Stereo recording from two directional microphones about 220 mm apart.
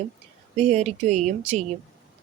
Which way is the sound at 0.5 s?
30° right (ahead or behind).